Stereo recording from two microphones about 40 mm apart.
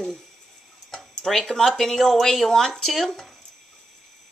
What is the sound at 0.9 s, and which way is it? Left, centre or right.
Speech, centre.